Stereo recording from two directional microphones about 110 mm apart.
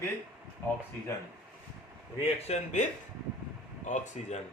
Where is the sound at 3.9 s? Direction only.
90° left.